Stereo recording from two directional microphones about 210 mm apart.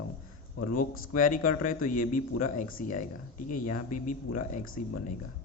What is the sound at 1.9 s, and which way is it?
A man's voice, 40° left (ahead or behind).